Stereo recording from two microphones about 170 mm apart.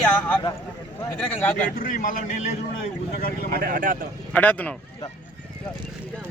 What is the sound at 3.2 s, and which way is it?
Speech, 60° left (ahead or behind).